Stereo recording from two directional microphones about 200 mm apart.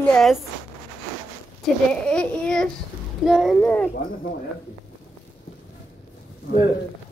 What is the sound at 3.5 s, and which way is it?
Speech, 10° left (ahead or behind).